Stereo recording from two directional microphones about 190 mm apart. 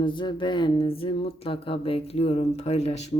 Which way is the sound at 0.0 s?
25° left (ahead or behind).